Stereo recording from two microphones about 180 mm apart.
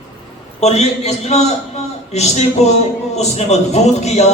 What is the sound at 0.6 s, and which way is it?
A man's voice, 35° left (ahead or behind).